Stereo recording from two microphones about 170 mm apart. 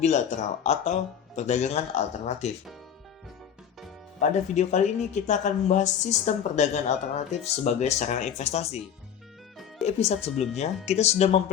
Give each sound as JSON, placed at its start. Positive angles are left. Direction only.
{"t": 0.0, "sound": "speech", "side_deg": 45}
{"t": 4.2, "sound": "speech", "side_deg": 45}
{"t": 9.8, "sound": "speech", "side_deg": 40}